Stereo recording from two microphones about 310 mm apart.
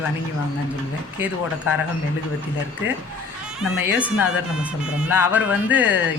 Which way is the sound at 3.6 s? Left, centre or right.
Centre.